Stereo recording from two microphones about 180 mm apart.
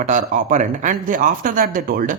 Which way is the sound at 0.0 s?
40° right (ahead or behind).